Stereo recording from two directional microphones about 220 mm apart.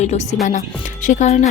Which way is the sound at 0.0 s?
30° left (ahead or behind).